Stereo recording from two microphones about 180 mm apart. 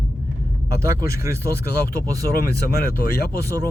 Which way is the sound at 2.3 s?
55° left (ahead or behind).